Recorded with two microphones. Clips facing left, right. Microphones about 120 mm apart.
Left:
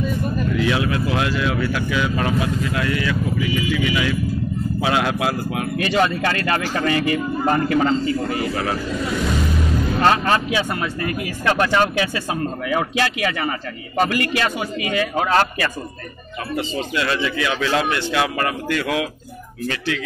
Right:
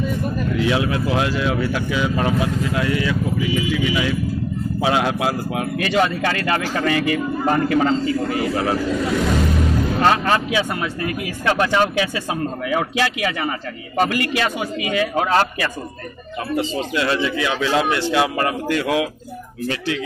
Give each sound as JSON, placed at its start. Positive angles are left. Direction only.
{"t": 0.6, "sound": "speech", "side_deg": -20}
{"t": 1.0, "sound": "speech", "side_deg": -30}
{"t": 5.9, "sound": "speech", "side_deg": -5}
{"t": 9.9, "sound": "speech", "side_deg": -5}
{"t": 16.5, "sound": "speech", "side_deg": -20}